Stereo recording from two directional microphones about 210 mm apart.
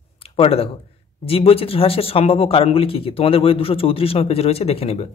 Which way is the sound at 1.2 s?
25° left (ahead or behind).